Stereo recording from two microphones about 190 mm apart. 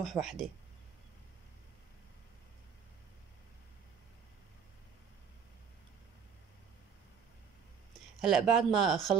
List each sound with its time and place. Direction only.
0.0 s speech: centre (ahead or behind)
8.2 s speech: centre (ahead or behind)